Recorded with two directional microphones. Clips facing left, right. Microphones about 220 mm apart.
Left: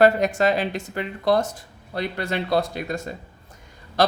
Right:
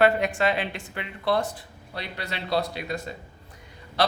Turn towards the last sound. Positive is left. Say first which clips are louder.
# left 4 dB
turn(degrees=45)  # may be behind; listen again after turning